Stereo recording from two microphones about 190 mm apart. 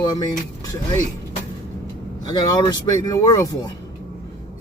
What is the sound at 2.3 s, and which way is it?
A man's voice, 20° left (ahead or behind).